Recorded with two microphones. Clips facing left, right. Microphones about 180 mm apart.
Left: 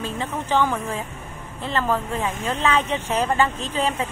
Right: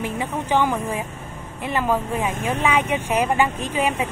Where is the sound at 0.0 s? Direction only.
15° right (ahead or behind).